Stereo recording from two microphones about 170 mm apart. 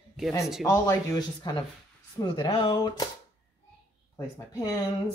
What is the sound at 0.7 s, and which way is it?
Speech, 20° left (ahead or behind).